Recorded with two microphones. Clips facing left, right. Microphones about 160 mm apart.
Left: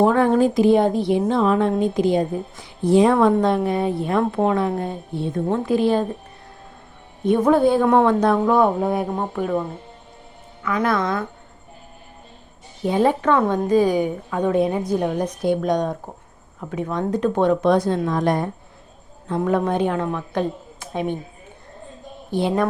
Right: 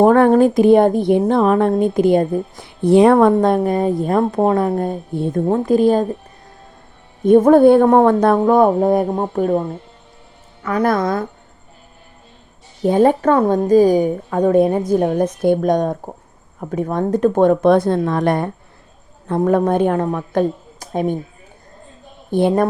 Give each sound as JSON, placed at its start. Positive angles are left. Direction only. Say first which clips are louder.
{"t": 0.0, "sound": "a woman's voice", "louder": "right 5 dB", "side_deg": -55}
{"t": 3.3, "sound": "a woman's voice", "louder": "right 4 dB", "side_deg": -45}
{"t": 7.3, "sound": "a woman's voice", "louder": "right 7 dB", "side_deg": -45}
{"t": 10.6, "sound": "speech", "louder": "right 4 dB", "side_deg": -35}
{"t": 12.8, "sound": "a woman's voice", "louder": "right 5 dB", "side_deg": -45}
{"t": 19.3, "sound": "a woman's voice", "louder": "right 5 dB", "side_deg": -45}
{"t": 22.3, "sound": "speech", "louder": "right 6 dB", "side_deg": -50}